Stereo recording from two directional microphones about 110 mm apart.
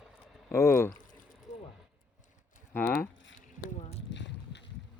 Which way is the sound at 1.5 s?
90° left.